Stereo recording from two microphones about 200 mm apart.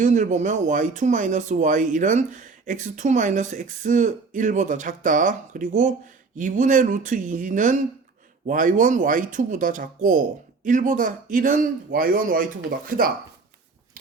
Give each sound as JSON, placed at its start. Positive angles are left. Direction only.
{"t": 0.0, "sound": "speech", "side_deg": -40}